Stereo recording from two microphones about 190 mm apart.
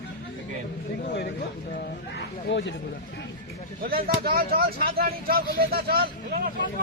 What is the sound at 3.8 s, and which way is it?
Speech, 50° right (ahead or behind).